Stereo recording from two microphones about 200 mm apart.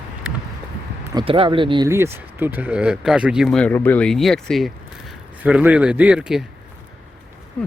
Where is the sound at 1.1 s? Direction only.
25° right (ahead or behind).